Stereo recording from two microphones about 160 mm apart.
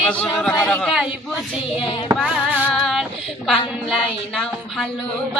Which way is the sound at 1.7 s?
35° left (ahead or behind).